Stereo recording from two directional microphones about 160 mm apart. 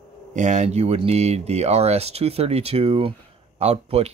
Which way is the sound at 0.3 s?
50° right (ahead or behind).